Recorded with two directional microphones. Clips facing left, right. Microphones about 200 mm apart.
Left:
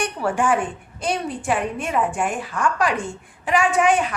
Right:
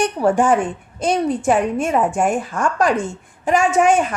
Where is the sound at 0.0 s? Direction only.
40° right (ahead or behind).